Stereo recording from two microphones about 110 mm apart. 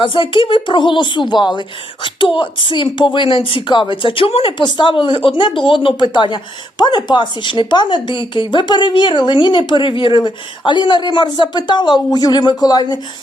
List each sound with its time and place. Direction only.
0.0 s speech: 50° left (ahead or behind)
4.5 s speech: 50° left (ahead or behind)